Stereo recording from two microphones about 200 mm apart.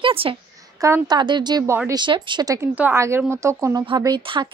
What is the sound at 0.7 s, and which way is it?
A woman's voice, 15° right (ahead or behind).